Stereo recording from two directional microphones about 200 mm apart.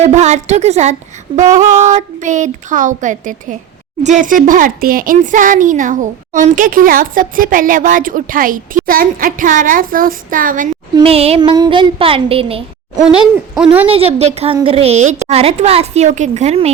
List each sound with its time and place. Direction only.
0.0 s a woman's voice: 35° right (ahead or behind)
10.9 s a woman's voice: 30° right (ahead or behind)
13.5 s speech: 5° right (ahead or behind)
13.9 s a woman's voice: 30° right (ahead or behind)